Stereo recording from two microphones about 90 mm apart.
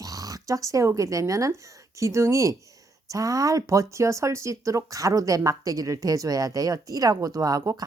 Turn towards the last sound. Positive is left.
turn(degrees=-35)  # may be behind; listen again after turning